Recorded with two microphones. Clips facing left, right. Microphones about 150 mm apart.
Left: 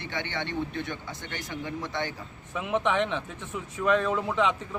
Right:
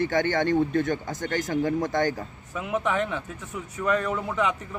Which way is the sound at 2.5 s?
20° left (ahead or behind).